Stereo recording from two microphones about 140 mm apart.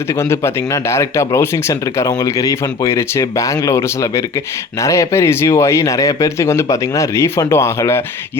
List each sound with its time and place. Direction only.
0.1 s speech: 20° left (ahead or behind)